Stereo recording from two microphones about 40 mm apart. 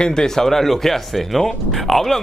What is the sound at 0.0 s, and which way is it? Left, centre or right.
Speech, centre.